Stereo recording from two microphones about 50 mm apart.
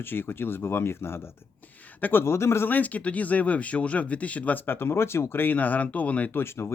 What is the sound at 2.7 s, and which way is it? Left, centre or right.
Speech, left.